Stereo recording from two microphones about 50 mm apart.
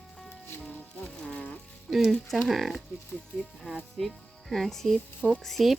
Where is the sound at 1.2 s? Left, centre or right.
Centre.